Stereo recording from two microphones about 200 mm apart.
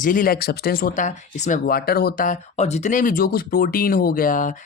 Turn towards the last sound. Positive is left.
turn(degrees=40)  # may be behind; listen again after turning